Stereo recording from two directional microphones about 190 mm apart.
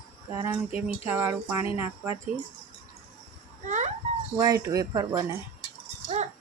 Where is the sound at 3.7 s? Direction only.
40° right (ahead or behind).